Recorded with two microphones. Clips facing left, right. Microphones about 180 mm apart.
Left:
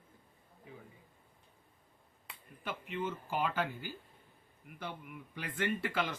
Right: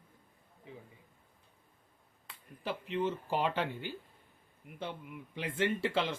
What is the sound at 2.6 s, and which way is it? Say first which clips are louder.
Speech: right 4 dB; 35° right (ahead or behind).